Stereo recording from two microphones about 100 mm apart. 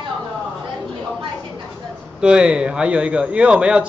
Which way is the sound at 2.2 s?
10° right (ahead or behind).